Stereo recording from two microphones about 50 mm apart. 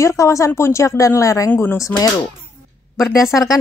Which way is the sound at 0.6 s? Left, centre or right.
Left.